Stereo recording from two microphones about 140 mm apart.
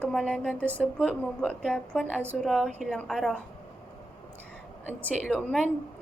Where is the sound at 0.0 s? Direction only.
5° left (ahead or behind).